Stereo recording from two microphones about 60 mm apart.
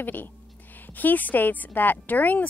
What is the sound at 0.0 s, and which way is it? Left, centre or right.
A woman's voice, left.